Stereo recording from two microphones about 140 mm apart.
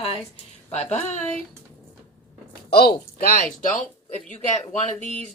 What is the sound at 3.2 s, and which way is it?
Speech, 90° left.